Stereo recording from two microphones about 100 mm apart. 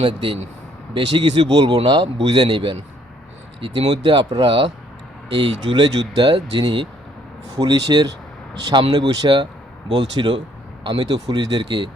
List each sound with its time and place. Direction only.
0.0 s speech: 60° right (ahead or behind)
4.0 s speech: 50° right (ahead or behind)
11.1 s speech: 40° right (ahead or behind)